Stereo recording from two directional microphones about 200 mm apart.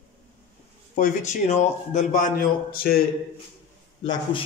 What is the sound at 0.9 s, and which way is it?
A man's voice, 40° left (ahead or behind).